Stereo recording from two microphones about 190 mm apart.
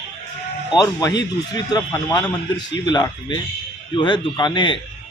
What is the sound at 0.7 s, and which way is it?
A man's voice, 20° left (ahead or behind).